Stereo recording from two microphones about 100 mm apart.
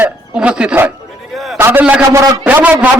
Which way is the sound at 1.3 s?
Centre (ahead or behind).